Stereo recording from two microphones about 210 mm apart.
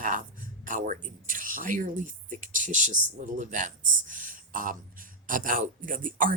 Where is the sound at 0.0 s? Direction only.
40° right (ahead or behind).